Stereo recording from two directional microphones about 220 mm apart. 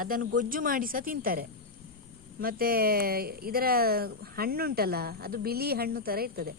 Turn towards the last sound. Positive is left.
turn(degrees=-45)  # may be behind; listen again after turning